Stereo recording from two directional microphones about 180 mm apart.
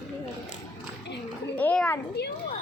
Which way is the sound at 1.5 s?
5° left (ahead or behind).